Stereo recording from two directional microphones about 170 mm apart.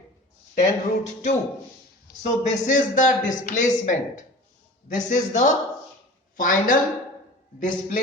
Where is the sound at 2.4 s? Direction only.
45° left (ahead or behind).